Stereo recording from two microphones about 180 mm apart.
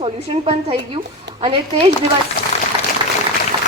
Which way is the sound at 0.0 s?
30° right (ahead or behind).